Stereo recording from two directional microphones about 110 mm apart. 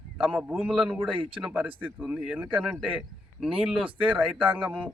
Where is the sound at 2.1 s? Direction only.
10° right (ahead or behind).